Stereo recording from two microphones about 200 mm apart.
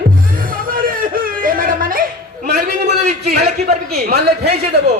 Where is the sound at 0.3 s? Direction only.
45° right (ahead or behind).